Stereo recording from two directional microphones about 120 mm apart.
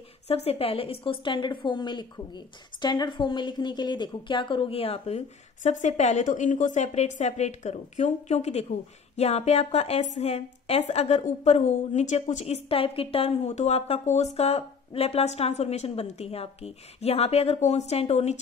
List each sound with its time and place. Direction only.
0.3 s a woman's voice: 55° left (ahead or behind)